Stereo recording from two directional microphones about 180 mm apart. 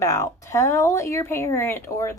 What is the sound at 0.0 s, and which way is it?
A woman's voice, 15° left (ahead or behind).